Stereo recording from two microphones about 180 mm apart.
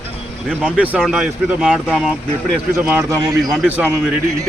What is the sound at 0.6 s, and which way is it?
Speech, 10° right (ahead or behind).